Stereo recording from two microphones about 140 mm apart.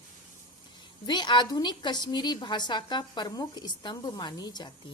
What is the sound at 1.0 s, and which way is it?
Speech, 30° left (ahead or behind).